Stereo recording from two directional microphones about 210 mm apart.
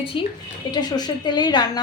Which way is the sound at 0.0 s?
25° left (ahead or behind).